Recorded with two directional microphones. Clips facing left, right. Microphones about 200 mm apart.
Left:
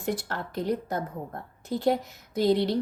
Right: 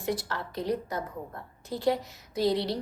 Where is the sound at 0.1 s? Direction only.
50° left (ahead or behind).